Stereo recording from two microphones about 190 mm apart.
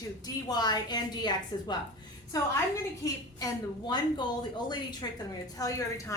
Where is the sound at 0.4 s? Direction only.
20° left (ahead or behind).